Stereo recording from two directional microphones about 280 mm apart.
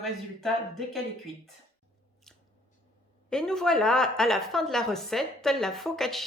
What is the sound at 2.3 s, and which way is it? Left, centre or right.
Scissors, centre.